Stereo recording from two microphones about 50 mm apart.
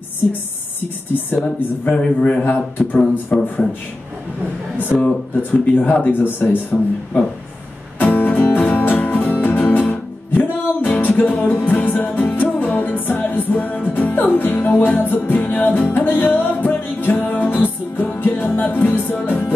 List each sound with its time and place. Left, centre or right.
1.4 s speech: left
3.3 s a man's voice: centre
4.7 s speech: left
8.0 s music: left